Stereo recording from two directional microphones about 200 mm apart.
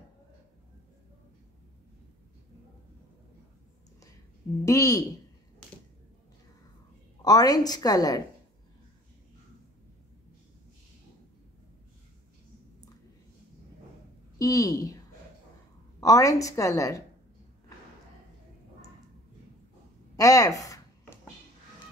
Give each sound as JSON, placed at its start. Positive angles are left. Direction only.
{"t": 4.6, "sound": "a woman's voice", "side_deg": 15}
{"t": 7.2, "sound": "a woman's voice", "side_deg": 20}
{"t": 14.4, "sound": "a woman's voice", "side_deg": 15}
{"t": 20.2, "sound": "a sound", "side_deg": 15}